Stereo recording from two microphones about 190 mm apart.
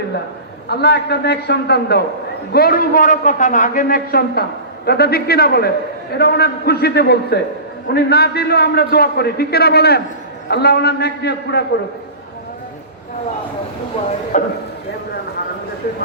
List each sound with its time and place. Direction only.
0.7 s a man's voice: 60° left (ahead or behind)
14.3 s a man's voice: 40° left (ahead or behind)